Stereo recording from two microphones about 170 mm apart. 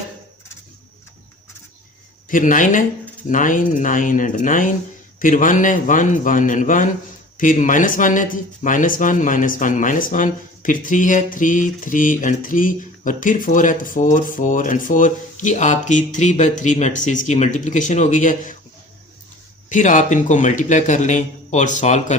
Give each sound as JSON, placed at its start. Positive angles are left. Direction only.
{"t": 2.3, "sound": "speech", "side_deg": 50}
{"t": 19.7, "sound": "speech", "side_deg": 45}